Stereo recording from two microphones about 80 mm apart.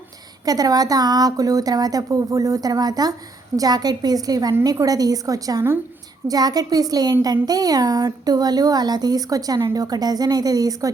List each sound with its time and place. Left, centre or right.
0.4 s a woman's voice: right